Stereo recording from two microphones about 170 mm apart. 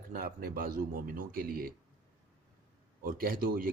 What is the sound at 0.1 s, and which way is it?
A man's voice, 60° right (ahead or behind).